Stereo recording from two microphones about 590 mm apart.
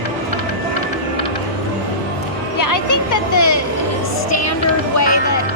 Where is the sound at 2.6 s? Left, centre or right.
Left.